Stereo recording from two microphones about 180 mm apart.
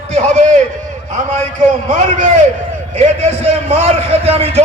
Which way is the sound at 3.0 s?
35° right (ahead or behind).